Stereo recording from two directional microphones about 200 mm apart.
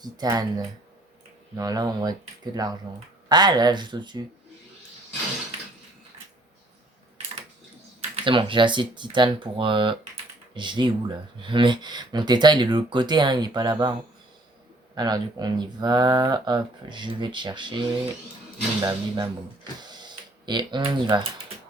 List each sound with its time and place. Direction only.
0.0 s speech: 20° right (ahead or behind)
1.5 s speech: 20° right (ahead or behind)
8.1 s speech: 25° right (ahead or behind)
14.9 s speech: 20° right (ahead or behind)
19.8 s a sound: 20° right (ahead or behind)